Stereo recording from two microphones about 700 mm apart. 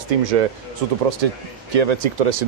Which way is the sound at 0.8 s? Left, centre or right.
Right.